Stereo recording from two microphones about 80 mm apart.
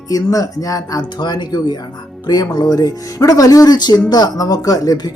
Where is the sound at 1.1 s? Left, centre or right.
Left.